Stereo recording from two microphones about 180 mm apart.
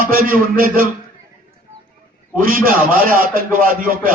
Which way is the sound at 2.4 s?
50° right (ahead or behind).